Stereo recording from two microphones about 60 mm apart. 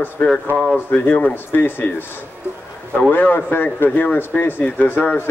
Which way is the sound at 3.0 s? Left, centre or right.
Left.